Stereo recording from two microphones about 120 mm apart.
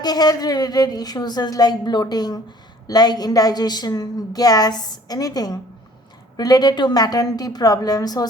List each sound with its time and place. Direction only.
0.0 s a woman's voice: 35° left (ahead or behind)